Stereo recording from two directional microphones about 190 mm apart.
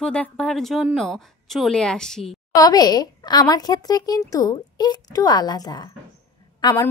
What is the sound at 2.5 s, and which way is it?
A woman's voice, 20° left (ahead or behind).